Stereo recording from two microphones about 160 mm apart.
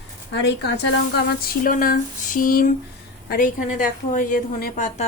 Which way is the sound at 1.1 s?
75° left (ahead or behind).